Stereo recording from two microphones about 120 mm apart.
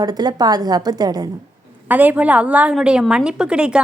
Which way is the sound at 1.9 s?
15° right (ahead or behind).